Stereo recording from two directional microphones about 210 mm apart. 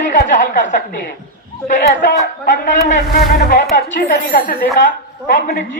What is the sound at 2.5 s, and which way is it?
A woman's voice, 35° left (ahead or behind).